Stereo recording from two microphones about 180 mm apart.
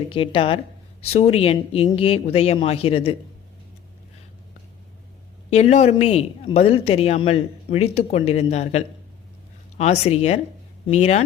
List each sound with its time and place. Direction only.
0.1 s speech: 30° left (ahead or behind)
5.5 s speech: 35° left (ahead or behind)